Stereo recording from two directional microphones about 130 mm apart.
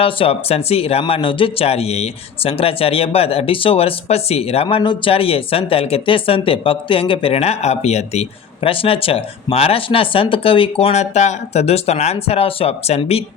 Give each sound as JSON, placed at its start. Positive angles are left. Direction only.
{"t": 0.0, "sound": "speech", "side_deg": 45}